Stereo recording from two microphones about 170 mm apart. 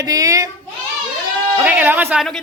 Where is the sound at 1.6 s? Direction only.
10° right (ahead or behind).